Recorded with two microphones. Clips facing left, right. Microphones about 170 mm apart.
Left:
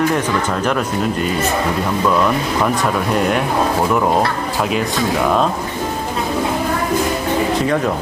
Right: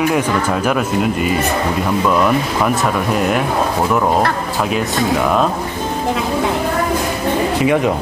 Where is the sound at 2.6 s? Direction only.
5° right (ahead or behind).